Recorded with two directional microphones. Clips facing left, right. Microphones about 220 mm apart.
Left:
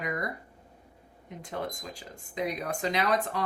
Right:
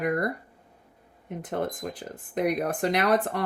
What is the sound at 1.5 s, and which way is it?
A woman's voice, 70° right (ahead or behind).